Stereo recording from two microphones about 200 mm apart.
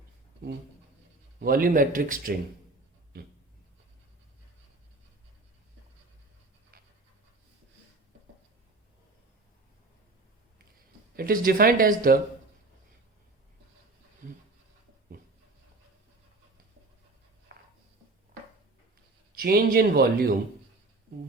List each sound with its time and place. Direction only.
1.4 s speech: 45° right (ahead or behind)
3.1 s a sound: 50° right (ahead or behind)
11.2 s speech: 45° right (ahead or behind)
19.3 s speech: 50° right (ahead or behind)